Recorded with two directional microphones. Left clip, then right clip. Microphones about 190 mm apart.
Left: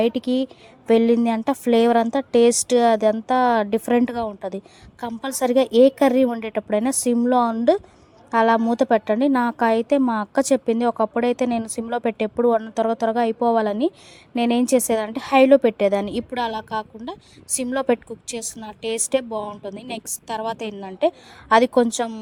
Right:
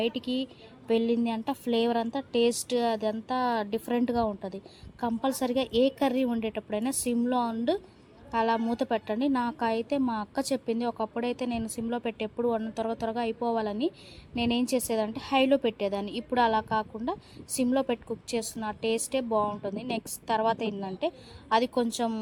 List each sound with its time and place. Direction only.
0.0 s a woman's voice: 45° left (ahead or behind)
20.2 s a woman's voice: 5° left (ahead or behind)
20.6 s a woman's voice: 35° left (ahead or behind)